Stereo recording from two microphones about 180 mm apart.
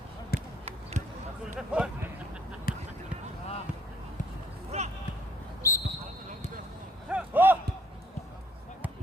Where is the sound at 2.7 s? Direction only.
55° left (ahead or behind).